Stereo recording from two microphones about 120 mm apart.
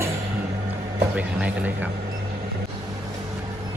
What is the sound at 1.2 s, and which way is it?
Speech, 10° right (ahead or behind).